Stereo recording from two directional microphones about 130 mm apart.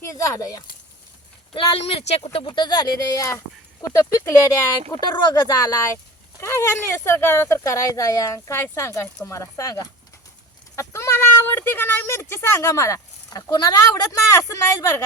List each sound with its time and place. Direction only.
0.0 s speech: 20° left (ahead or behind)
1.5 s speech: 50° left (ahead or behind); by 3.4 s 25° left (ahead or behind)
4.9 s speech: 35° left (ahead or behind)